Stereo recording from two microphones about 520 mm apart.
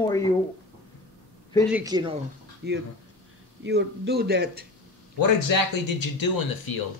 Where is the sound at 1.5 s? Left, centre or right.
Centre.